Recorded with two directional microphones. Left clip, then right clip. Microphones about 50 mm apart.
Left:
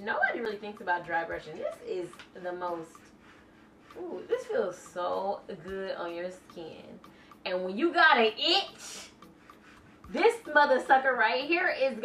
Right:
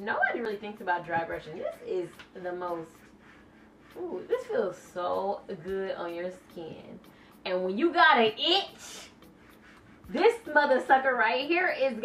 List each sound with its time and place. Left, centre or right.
0.0 s a sound: centre
0.7 s speech: centre
4.0 s a woman's voice: centre
10.1 s speech: centre
11.7 s a woman's voice: centre